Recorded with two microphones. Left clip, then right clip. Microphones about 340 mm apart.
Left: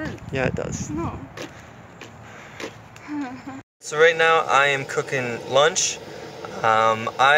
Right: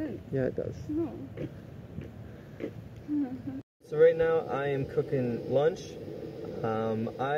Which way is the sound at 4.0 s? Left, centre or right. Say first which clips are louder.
Left 7 dB; left.